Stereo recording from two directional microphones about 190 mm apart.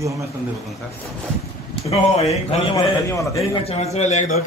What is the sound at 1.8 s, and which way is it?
Speech, 35° left (ahead or behind).